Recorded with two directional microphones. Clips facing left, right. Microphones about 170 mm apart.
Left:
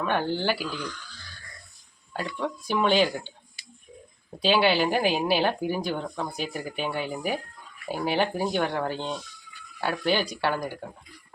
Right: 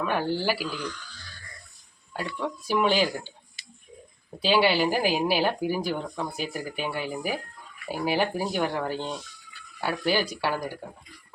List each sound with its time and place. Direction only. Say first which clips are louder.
0.0 s speech: even; 5° right (ahead or behind)
2.6 s speech: left 1 dB; 5° right (ahead or behind)
4.4 s speech: even; centre (ahead or behind)